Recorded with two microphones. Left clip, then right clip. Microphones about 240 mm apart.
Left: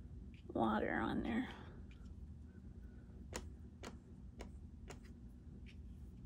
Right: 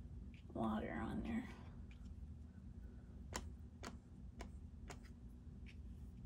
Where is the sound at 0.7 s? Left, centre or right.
Left.